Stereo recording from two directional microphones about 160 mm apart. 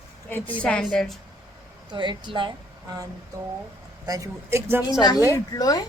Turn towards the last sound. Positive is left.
turn(degrees=25)  # may be behind; listen again after turning